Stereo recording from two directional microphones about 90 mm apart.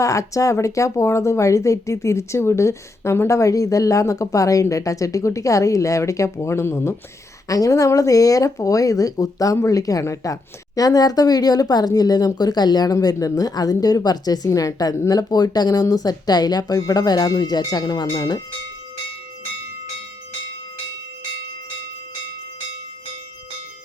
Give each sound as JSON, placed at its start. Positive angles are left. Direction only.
{"t": 0.0, "sound": "speech", "side_deg": 35}
{"t": 7.4, "sound": "speech", "side_deg": 40}